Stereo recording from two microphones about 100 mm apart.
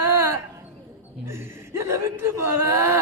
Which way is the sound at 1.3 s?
25° right (ahead or behind).